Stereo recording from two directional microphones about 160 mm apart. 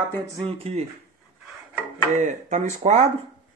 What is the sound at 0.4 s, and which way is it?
Speech, 40° right (ahead or behind).